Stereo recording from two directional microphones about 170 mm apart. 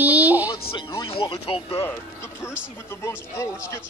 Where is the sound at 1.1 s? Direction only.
30° left (ahead or behind).